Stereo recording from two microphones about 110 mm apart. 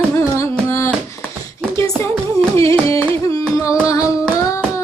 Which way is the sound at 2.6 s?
25° left (ahead or behind).